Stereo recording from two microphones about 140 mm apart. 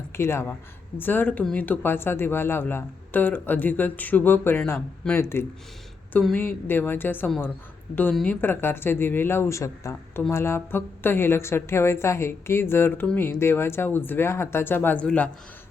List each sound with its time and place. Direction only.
0.1 s speech: 20° left (ahead or behind)